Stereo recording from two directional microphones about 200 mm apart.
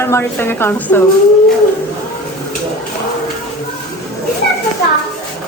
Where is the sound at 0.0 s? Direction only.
10° left (ahead or behind).